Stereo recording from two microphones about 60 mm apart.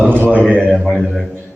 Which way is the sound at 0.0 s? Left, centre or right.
Right.